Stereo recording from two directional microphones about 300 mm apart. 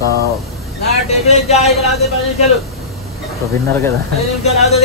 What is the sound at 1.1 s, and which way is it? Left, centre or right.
Speech, left.